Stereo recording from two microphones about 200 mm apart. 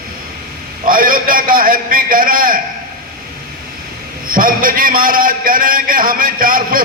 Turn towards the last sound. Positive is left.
turn(degrees=-45)  # may be behind; listen again after turning